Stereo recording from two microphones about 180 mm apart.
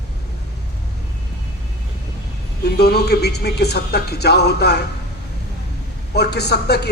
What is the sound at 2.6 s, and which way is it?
Speech, 65° left (ahead or behind).